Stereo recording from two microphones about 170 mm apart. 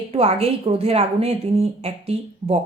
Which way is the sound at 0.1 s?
35° right (ahead or behind).